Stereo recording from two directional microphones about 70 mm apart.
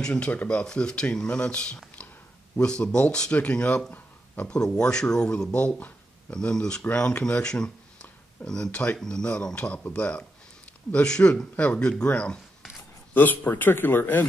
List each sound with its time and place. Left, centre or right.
0.0 s speech: centre
13.1 s speech: left